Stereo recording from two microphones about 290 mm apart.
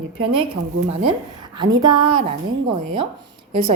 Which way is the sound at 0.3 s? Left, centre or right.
Centre.